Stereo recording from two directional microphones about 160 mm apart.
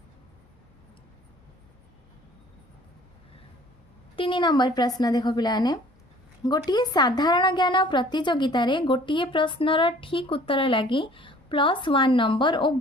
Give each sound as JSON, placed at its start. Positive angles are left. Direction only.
{"t": 4.1, "sound": "a woman's voice", "side_deg": 30}